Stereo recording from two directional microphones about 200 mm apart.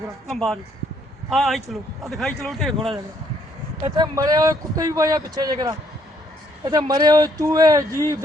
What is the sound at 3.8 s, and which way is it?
A man's voice, 20° right (ahead or behind).